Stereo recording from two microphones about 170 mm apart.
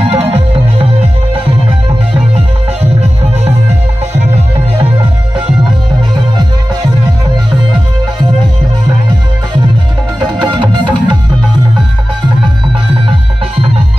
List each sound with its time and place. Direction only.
0.1 s music: 35° right (ahead or behind)
2.3 s music: 40° right (ahead or behind)
10.4 s music: 30° right (ahead or behind)